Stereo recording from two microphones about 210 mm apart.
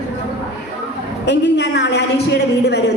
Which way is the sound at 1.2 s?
55° left (ahead or behind).